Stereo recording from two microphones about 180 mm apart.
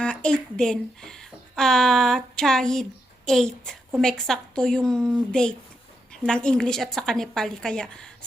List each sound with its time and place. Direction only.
0.0 s a woman's voice: 5° left (ahead or behind)